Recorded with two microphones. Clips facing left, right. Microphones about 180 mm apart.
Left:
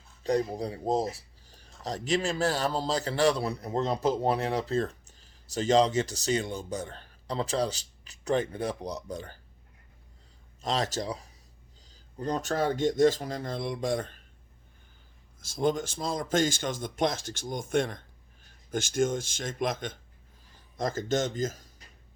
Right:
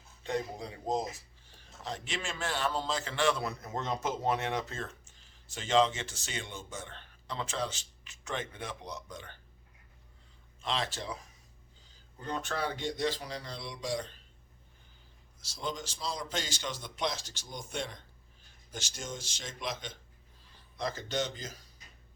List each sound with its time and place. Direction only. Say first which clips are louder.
0.2 s a man's voice: left 7 dB; 40° left (ahead or behind)
10.6 s speech: left 6 dB; 40° left (ahead or behind)
15.4 s speech: left 11 dB; 50° left (ahead or behind)